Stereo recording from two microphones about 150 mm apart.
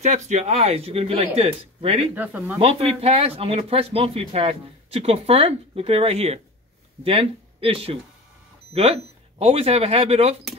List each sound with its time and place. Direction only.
0.0 s speech: 50° right (ahead or behind)
2.1 s speech: 10° right (ahead or behind)
2.6 s speech: 40° right (ahead or behind)